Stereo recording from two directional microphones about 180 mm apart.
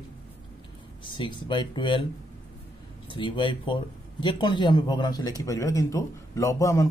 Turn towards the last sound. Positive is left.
turn(degrees=15)  # may be behind; listen again after turning